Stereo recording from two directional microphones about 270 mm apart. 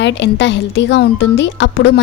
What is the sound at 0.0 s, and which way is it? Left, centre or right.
A woman's voice, left.